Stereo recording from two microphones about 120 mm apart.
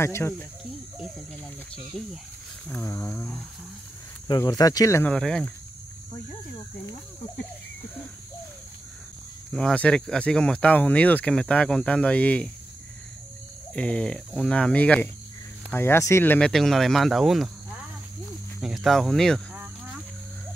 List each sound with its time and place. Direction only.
0.0 s speech: 20° left (ahead or behind)
2.0 s speech: 5° left (ahead or behind)
2.8 s speech: 25° left (ahead or behind)
4.5 s speech: 30° left (ahead or behind)
5.0 s speech: 5° left (ahead or behind)
9.5 s speech: 5° left (ahead or behind)
13.7 s speech: 10° left (ahead or behind)
15.7 s speech: 20° left (ahead or behind)
16.3 s speech: 5° left (ahead or behind)
18.6 s speech: centre (ahead or behind)
19.5 s cricket: 10° right (ahead or behind)